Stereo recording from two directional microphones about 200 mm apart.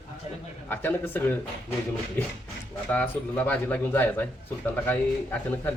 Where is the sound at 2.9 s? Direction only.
10° left (ahead or behind).